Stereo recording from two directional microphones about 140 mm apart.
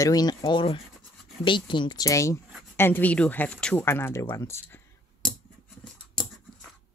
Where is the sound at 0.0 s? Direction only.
25° left (ahead or behind).